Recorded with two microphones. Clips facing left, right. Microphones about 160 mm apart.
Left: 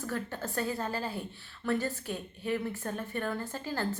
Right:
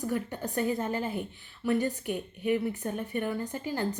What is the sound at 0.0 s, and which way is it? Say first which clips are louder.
A woman's voice: right 4 dB; 15° right (ahead or behind).